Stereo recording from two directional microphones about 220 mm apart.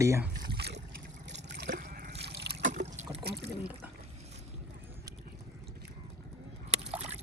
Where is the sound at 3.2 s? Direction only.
45° right (ahead or behind).